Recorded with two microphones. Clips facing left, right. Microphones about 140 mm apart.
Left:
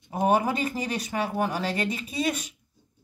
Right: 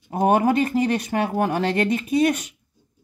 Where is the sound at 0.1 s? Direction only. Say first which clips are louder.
Right 5 dB; 50° right (ahead or behind).